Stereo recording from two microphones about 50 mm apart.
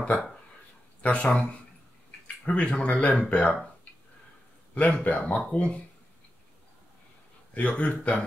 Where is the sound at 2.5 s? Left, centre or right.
Left.